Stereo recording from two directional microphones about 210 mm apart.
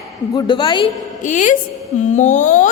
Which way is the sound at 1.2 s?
35° left (ahead or behind).